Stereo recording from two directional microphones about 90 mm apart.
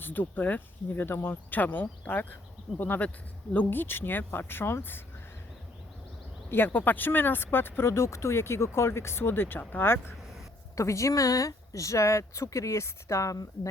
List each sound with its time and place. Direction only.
0.0 s speech: 20° left (ahead or behind)
6.5 s speech: 20° left (ahead or behind); by 13.5 s 40° left (ahead or behind)